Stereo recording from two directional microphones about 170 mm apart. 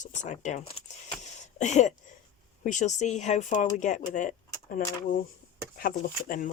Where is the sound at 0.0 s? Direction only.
45° left (ahead or behind).